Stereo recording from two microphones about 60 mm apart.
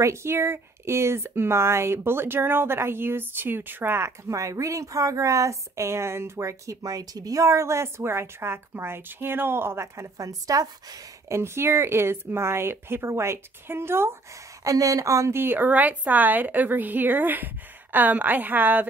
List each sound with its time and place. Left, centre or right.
0.0 s speech: right
4.3 s speech: right
11.2 s speech: right
14.6 s speech: right
15.3 s a woman's voice: right